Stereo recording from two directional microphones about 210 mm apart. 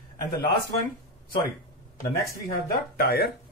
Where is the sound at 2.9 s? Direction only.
45° left (ahead or behind).